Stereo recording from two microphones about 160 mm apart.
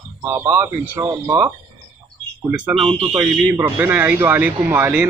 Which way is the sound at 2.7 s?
35° right (ahead or behind).